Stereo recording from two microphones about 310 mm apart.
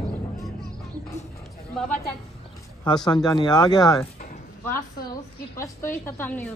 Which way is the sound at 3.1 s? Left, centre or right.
Centre.